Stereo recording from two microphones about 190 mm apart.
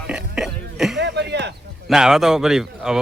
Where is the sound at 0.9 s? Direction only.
65° right (ahead or behind).